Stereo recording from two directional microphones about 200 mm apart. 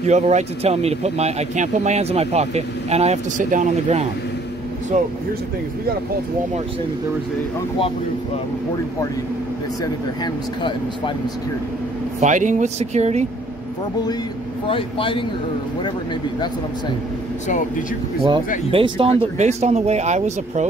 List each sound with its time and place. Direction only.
0.0 s speech: 35° right (ahead or behind)
12.2 s speech: 40° right (ahead or behind)
14.7 s speech: 25° left (ahead or behind)
18.7 s speech: 25° right (ahead or behind)